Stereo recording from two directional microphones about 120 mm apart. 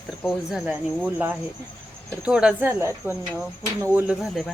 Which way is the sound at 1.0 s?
10° right (ahead or behind).